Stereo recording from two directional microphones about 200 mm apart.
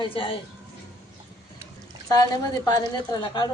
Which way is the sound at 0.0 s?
25° left (ahead or behind).